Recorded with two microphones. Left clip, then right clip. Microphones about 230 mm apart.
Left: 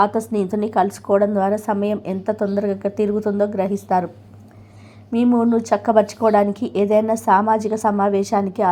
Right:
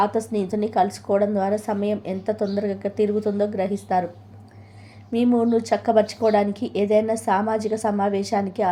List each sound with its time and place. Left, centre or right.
0.0 s a woman's voice: centre
5.1 s a woman's voice: centre